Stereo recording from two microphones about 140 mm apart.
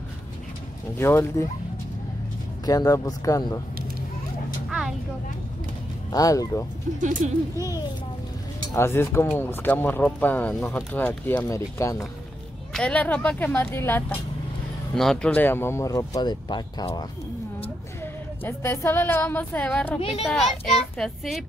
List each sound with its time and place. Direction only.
0.9 s a woman's voice: 20° left (ahead or behind)
2.6 s speech: 25° left (ahead or behind)
4.6 s vehicle: 5° right (ahead or behind)
6.1 s speech: 25° left (ahead or behind)
7.0 s speech: 65° right (ahead or behind)
8.7 s a woman's voice: 20° left (ahead or behind)
12.7 s a woman's voice: 10° left (ahead or behind); by 17.0 s 30° left (ahead or behind)
18.0 s a woman's voice: 15° left (ahead or behind)
20.0 s a child's voice: 40° left (ahead or behind)
20.2 s speech: centre (ahead or behind)